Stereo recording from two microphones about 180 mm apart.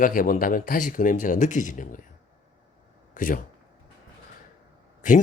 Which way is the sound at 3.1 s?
50° left (ahead or behind).